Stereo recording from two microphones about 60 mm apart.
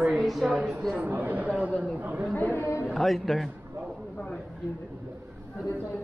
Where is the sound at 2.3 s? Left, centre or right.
Left.